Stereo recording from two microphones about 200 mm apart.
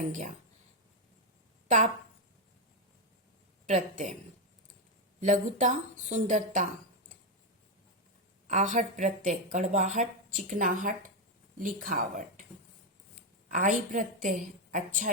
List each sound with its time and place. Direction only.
0.1 s a woman's voice: 40° right (ahead or behind)
1.6 s a sound: 35° right (ahead or behind)
3.7 s a woman's voice: 35° right (ahead or behind)
5.2 s a woman's voice: 35° right (ahead or behind)
8.4 s a woman's voice: 35° right (ahead or behind)
13.5 s a woman's voice: 40° right (ahead or behind)